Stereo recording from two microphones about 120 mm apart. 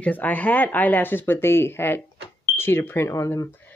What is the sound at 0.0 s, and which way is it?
A woman's voice, 15° left (ahead or behind).